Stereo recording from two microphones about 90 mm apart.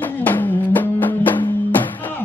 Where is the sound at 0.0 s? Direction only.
20° left (ahead or behind).